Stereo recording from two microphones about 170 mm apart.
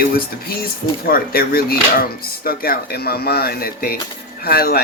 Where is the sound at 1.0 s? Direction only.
60° left (ahead or behind).